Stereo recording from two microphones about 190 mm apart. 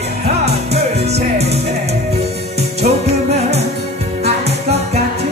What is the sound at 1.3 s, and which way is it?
Music, 35° right (ahead or behind).